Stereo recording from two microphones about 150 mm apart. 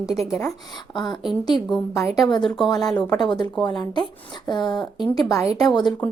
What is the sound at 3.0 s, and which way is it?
Speech, 30° left (ahead or behind).